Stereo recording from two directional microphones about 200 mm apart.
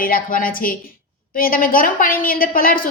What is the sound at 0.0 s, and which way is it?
A woman's voice, 45° left (ahead or behind).